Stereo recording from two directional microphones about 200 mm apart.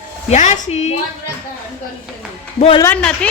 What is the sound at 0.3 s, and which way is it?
Speech, 35° left (ahead or behind).